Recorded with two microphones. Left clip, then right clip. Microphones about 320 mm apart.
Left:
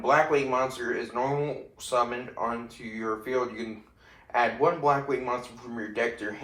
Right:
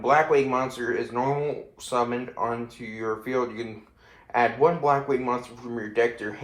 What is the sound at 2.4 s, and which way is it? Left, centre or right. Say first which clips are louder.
A man's voice: right 1 dB; right.